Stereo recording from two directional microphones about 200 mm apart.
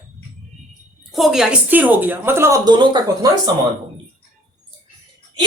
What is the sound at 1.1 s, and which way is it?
A woman's voice, centre (ahead or behind).